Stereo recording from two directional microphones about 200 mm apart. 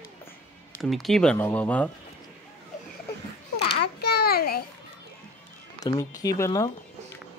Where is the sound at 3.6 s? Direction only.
55° left (ahead or behind).